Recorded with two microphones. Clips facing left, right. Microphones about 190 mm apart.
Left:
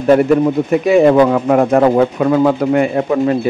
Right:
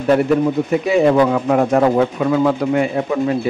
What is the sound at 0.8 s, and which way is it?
A man's voice, 55° left (ahead or behind).